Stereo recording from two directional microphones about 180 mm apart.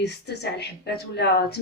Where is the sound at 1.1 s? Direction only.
65° left (ahead or behind).